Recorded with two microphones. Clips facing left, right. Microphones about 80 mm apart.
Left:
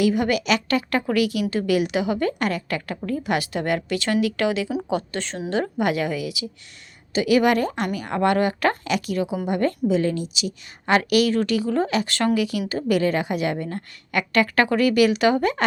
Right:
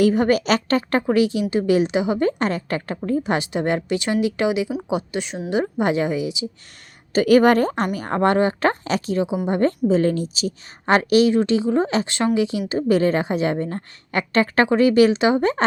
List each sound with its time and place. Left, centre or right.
0.0 s a woman's voice: right
7.1 s a woman's voice: right